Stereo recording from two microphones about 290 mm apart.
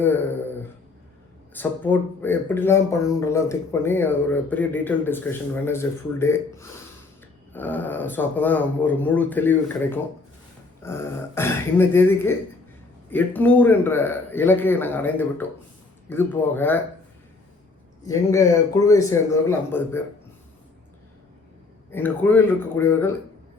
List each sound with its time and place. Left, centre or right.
0.0 s speech: centre
1.5 s speech: centre
18.0 s speech: centre
21.9 s speech: centre